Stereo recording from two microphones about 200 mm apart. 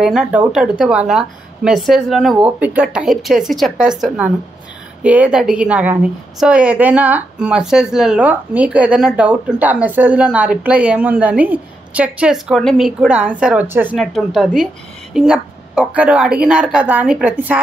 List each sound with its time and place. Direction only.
0.0 s a woman's voice: 5° right (ahead or behind)